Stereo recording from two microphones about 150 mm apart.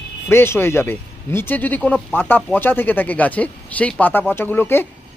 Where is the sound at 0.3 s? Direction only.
15° left (ahead or behind).